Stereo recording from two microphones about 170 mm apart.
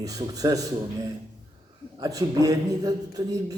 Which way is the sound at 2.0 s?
20° right (ahead or behind).